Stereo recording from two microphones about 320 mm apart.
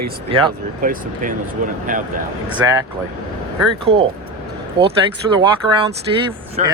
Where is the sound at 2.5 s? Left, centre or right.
Centre.